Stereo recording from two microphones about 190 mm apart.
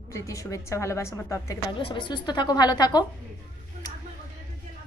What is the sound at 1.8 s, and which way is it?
A woman's voice, 25° left (ahead or behind).